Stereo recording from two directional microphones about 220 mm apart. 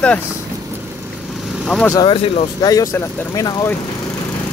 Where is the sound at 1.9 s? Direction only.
20° left (ahead or behind).